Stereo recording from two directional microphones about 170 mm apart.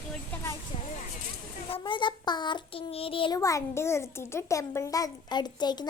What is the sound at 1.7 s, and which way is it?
A child's voice, 30° left (ahead or behind).